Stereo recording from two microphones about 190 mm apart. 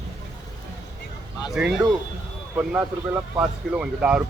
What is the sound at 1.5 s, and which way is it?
Speech, 5° right (ahead or behind).